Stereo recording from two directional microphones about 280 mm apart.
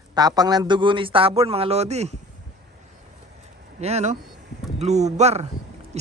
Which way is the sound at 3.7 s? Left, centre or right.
Right.